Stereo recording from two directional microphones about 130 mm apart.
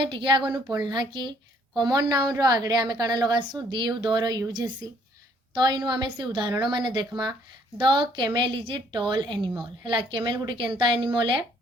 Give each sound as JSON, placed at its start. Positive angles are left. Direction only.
{"t": 0.1, "sound": "a woman's voice", "side_deg": -40}